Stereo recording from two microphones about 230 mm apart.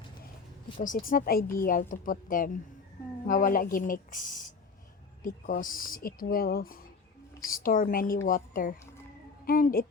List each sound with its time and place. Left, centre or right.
0.8 s speech: left